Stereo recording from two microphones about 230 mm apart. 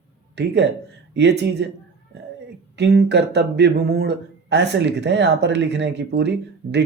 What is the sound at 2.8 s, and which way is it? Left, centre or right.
Speech, right.